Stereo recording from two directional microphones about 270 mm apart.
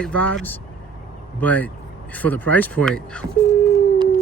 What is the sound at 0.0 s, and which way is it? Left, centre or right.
Speech, centre.